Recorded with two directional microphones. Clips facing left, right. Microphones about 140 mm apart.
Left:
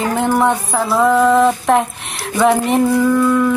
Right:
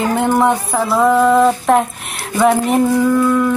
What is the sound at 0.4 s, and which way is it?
Music, centre (ahead or behind).